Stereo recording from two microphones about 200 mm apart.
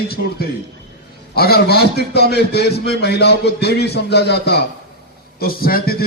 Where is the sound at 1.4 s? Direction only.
50° left (ahead or behind).